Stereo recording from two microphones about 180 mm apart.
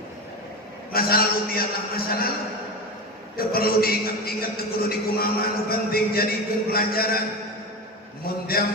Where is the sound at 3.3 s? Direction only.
55° left (ahead or behind).